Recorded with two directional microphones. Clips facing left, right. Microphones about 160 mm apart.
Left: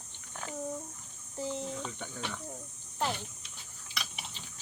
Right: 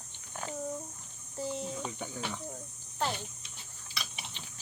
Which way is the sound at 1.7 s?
10° right (ahead or behind).